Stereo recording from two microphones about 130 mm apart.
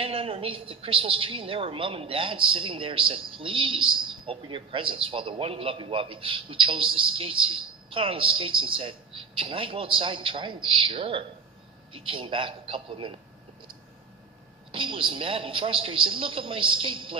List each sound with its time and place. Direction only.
0.0 s a woman's voice: 45° right (ahead or behind)
14.7 s a woman's voice: 40° right (ahead or behind)